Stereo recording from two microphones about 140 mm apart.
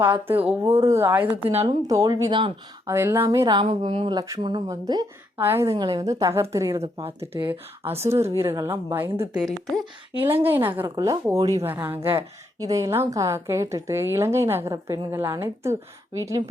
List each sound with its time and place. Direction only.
0.0 s speech: 15° right (ahead or behind)
1.5 s speech: 40° right (ahead or behind)
1.9 s a woman's voice: 25° right (ahead or behind)
3.7 s a woman's voice: 45° right (ahead or behind)
5.4 s speech: 15° right (ahead or behind)
5.7 s a woman's voice: 30° right (ahead or behind)
8.1 s a woman's voice: 20° right (ahead or behind)
9.3 s speech: centre (ahead or behind)
10.2 s speech: 15° right (ahead or behind)
10.8 s a woman's voice: 25° right (ahead or behind)